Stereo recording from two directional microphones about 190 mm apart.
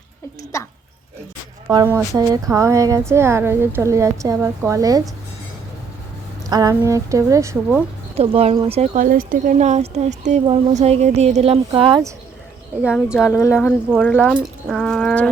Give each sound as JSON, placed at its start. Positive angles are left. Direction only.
{"t": 0.5, "sound": "speech", "side_deg": 15}
{"t": 1.6, "sound": "a woman's voice", "side_deg": -15}
{"t": 6.5, "sound": "a woman's voice", "side_deg": -20}
{"t": 8.1, "sound": "speech", "side_deg": -30}
{"t": 12.8, "sound": "speech", "side_deg": -5}
{"t": 13.3, "sound": "speech", "side_deg": 10}